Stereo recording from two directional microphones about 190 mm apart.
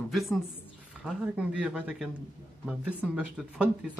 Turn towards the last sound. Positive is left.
turn(degrees=-5)  # may be behind; listen again after turning